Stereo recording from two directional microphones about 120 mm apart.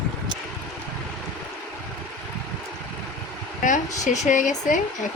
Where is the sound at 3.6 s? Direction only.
90° left.